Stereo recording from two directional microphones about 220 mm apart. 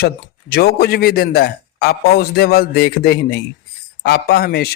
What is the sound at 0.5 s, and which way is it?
A man's voice, 45° left (ahead or behind).